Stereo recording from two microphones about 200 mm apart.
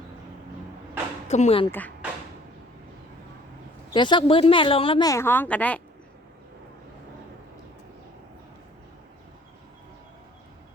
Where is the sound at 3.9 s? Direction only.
20° left (ahead or behind); by 5.8 s 5° left (ahead or behind).